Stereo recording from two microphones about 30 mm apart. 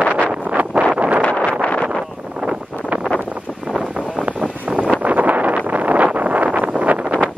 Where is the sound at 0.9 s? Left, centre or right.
Right.